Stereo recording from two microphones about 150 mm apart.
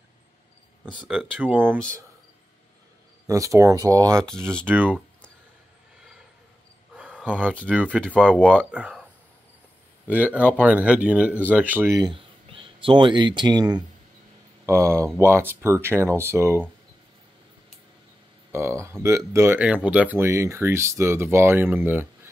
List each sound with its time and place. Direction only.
1.0 s speech: 10° right (ahead or behind)
3.3 s speech: 20° right (ahead or behind)
4.6 s speech: 10° right (ahead or behind)
7.0 s a sound: 5° right (ahead or behind)
7.5 s speech: 10° left (ahead or behind)
8.7 s speech: 5° right (ahead or behind)
10.0 s speech: 10° right (ahead or behind)
12.0 s speech: 35° right (ahead or behind); by 16.6 s 15° right (ahead or behind)
18.5 s speech: 15° right (ahead or behind)